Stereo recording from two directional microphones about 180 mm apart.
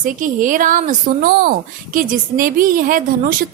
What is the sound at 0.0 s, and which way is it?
Speech, 45° right (ahead or behind).